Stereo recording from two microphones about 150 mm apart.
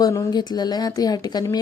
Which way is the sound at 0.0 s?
25° left (ahead or behind).